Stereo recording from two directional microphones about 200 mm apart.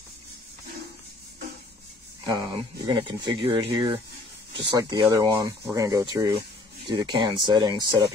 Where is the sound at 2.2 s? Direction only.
20° right (ahead or behind).